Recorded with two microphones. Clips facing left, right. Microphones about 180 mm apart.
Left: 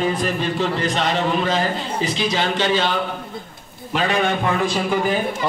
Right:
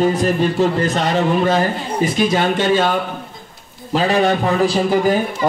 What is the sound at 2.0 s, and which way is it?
Speech, 50° right (ahead or behind).